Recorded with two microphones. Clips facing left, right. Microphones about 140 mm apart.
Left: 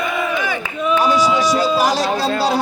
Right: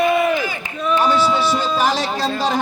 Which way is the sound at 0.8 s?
10° left (ahead or behind).